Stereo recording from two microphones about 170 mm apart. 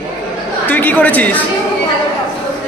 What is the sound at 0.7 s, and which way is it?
Speech, 10° left (ahead or behind).